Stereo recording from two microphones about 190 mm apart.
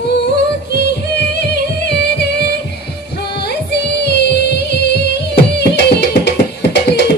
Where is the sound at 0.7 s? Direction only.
60° left (ahead or behind).